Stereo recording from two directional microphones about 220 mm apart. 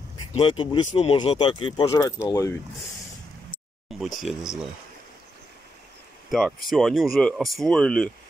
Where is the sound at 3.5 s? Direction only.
Centre (ahead or behind).